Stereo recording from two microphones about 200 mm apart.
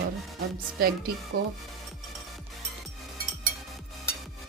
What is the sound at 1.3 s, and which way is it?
Speech, 50° right (ahead or behind).